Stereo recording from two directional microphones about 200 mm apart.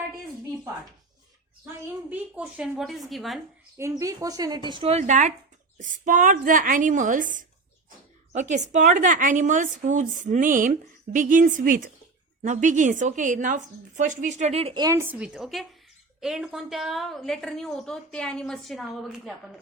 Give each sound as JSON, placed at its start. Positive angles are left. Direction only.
{"t": 1.6, "sound": "a woman's voice", "side_deg": -10}
{"t": 3.8, "sound": "a woman's voice", "side_deg": -15}
{"t": 15.2, "sound": "a woman's voice", "side_deg": -5}